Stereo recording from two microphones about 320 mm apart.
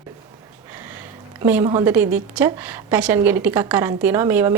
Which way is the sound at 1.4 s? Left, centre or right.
Centre.